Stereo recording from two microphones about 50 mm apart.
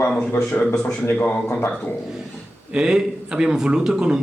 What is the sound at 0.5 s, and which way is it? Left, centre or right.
Speech, left.